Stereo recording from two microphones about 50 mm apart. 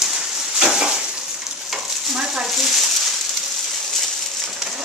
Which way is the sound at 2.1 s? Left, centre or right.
Centre.